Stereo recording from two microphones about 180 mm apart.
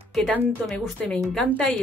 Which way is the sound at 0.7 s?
5° left (ahead or behind).